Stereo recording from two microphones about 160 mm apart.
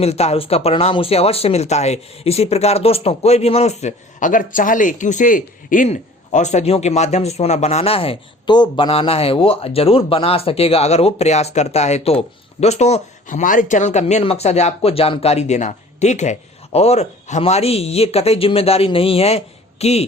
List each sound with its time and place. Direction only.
0.0 s speech: 40° left (ahead or behind)